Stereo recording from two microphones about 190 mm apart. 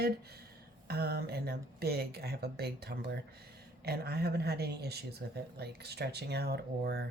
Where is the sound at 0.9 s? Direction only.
55° right (ahead or behind).